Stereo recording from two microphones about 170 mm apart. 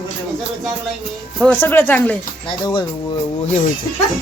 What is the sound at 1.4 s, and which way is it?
Speech, 10° left (ahead or behind).